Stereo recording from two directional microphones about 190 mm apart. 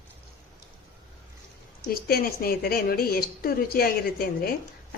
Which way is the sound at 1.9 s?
55° left (ahead or behind).